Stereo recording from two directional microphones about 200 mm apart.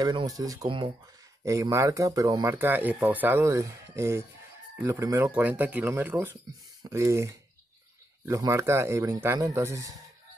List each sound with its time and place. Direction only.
0.0 s speech: 20° right (ahead or behind)
1.4 s speech: 15° right (ahead or behind)
8.3 s speech: 15° right (ahead or behind)